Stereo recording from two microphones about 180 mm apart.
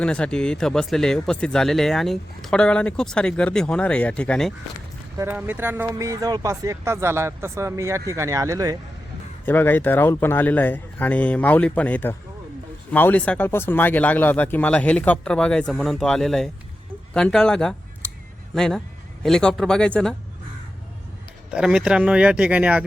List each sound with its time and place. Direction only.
0.0 s speech: 5° left (ahead or behind)
5.1 s speech: 15° right (ahead or behind)
9.5 s speech: 10° left (ahead or behind)
21.5 s speech: 5° right (ahead or behind)